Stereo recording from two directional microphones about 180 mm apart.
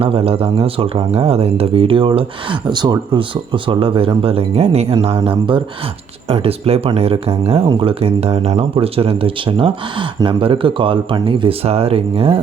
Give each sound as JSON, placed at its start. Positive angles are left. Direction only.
{"t": 0.0, "sound": "speech", "side_deg": -30}